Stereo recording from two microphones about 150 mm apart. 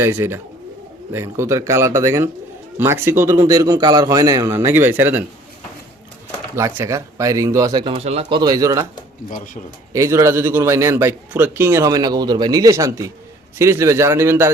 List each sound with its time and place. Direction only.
0.0 s a man's voice: 15° right (ahead or behind)
6.6 s a man's voice: 20° right (ahead or behind); by 8.3 s 45° right (ahead or behind)
8.3 s a man's voice: 25° right (ahead or behind)
9.9 s a man's voice: 20° right (ahead or behind)